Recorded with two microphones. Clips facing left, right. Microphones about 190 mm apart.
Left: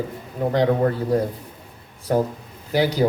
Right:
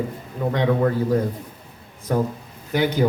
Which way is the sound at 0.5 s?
35° left (ahead or behind).